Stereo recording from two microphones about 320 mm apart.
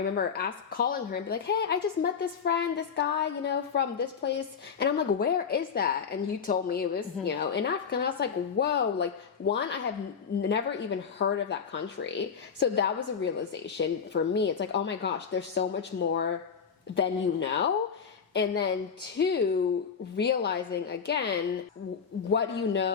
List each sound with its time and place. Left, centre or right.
0.2 s a woman's voice: left